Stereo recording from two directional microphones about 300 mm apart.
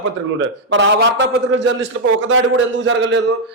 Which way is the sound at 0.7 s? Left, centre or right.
Right.